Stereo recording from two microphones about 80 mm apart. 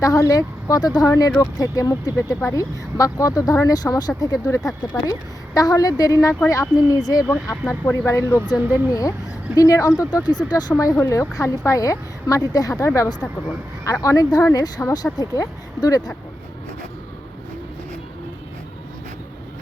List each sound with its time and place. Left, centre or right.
0.0 s speech: left
7.9 s speech: left